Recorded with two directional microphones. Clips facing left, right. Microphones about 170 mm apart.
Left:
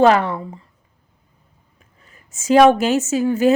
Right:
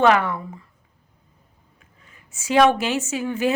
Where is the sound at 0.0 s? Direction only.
35° left (ahead or behind).